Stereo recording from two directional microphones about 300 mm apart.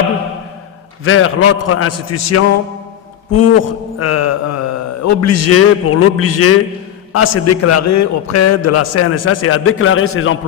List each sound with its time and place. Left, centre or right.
1.0 s a man's voice: left